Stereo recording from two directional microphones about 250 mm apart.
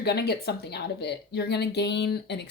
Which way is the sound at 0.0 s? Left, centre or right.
Left.